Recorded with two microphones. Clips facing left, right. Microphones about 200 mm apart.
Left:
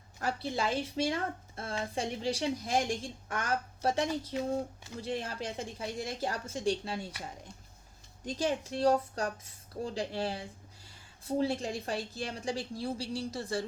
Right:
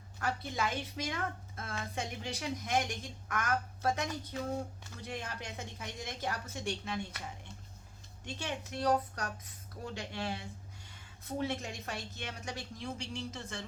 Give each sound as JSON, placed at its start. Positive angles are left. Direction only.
{"t": 0.2, "sound": "a woman's voice", "side_deg": 30}
{"t": 8.2, "sound": "a woman's voice", "side_deg": 35}